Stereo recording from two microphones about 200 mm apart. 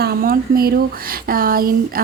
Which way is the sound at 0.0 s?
50° right (ahead or behind).